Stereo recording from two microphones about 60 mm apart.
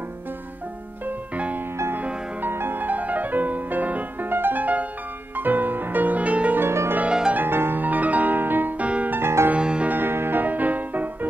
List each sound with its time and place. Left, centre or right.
1.0 s music: right
6.6 s music: right
7.0 s music: centre
7.3 s music: right
9.1 s music: right
9.5 s music: centre
9.8 s music: right